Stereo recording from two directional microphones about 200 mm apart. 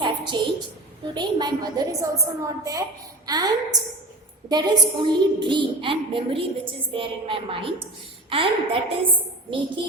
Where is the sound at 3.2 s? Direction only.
20° right (ahead or behind).